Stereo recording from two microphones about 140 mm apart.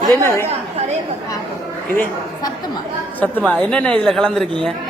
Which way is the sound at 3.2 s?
10° left (ahead or behind).